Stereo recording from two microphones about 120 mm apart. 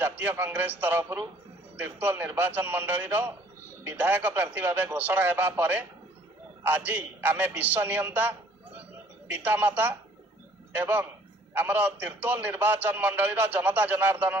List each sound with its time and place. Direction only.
0.2 s a man's voice: 15° right (ahead or behind)